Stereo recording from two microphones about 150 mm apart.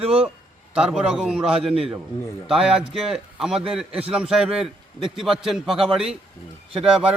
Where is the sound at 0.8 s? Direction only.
5° right (ahead or behind).